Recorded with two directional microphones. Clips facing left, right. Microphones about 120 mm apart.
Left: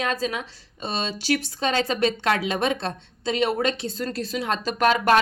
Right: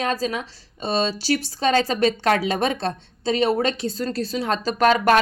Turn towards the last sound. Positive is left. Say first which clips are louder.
# right 2 dB
turn(degrees=-40)  # may be behind; listen again after turning